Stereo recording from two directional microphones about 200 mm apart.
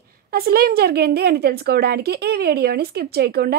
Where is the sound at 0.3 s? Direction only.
50° right (ahead or behind).